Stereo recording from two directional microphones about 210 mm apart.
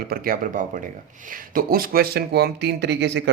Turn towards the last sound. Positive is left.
turn(degrees=-55)  # may be behind; listen again after turning